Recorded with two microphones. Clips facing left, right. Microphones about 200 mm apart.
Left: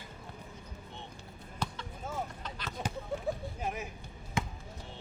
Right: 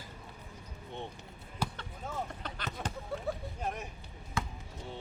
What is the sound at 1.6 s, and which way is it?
Basketball bounce, 10° right (ahead or behind).